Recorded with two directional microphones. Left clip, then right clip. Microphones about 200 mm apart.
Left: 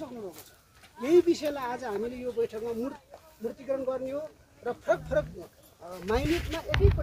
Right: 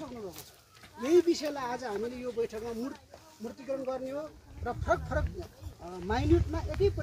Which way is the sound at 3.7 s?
15° left (ahead or behind).